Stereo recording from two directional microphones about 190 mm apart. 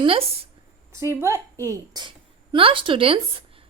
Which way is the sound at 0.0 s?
30° right (ahead or behind).